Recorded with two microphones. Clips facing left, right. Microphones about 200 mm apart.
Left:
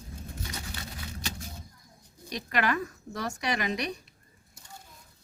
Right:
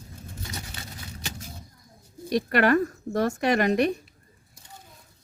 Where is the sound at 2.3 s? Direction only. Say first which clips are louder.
Right 8 dB; 50° right (ahead or behind).